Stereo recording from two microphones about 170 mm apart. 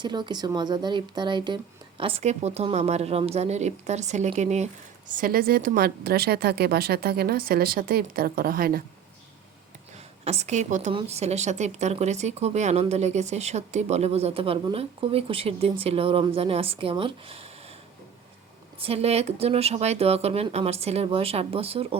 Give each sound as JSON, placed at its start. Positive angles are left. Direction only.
{"t": 0.0, "sound": "a woman's voice", "side_deg": -25}
{"t": 10.2, "sound": "a woman's voice", "side_deg": -40}
{"t": 18.8, "sound": "speech", "side_deg": -35}